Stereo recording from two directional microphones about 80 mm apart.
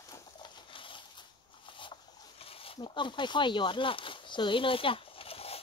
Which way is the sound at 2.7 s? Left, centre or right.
Left.